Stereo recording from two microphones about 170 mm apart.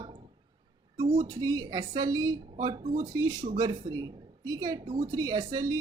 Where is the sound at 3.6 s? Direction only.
25° right (ahead or behind).